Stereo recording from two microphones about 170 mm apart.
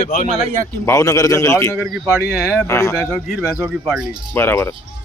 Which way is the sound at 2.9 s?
Centre (ahead or behind).